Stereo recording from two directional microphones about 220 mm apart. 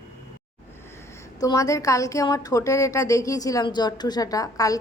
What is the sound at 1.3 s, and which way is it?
A woman's voice, 15° left (ahead or behind).